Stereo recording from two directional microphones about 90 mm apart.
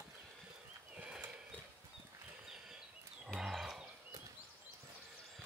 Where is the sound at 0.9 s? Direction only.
15° right (ahead or behind).